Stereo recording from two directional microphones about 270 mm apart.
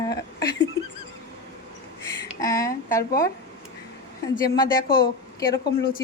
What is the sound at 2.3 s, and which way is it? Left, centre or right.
Speech, centre.